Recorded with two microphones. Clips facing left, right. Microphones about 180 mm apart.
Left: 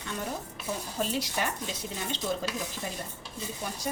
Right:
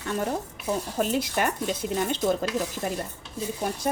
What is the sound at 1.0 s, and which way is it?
Speech, 55° right (ahead or behind).